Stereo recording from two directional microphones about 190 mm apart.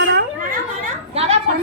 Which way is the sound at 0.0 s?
60° right (ahead or behind).